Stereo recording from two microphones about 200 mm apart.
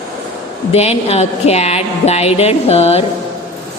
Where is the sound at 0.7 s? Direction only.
30° left (ahead or behind).